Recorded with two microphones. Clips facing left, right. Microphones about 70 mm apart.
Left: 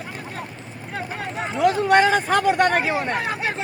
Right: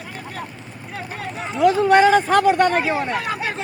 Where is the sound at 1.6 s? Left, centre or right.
Centre.